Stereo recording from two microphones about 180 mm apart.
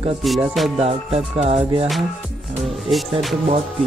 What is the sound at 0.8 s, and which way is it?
Speech, 35° right (ahead or behind).